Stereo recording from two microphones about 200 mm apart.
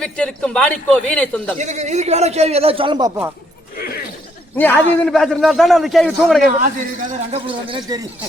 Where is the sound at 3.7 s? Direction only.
50° left (ahead or behind).